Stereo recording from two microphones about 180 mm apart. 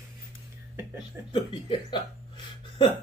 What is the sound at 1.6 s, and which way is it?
Speech, 25° left (ahead or behind).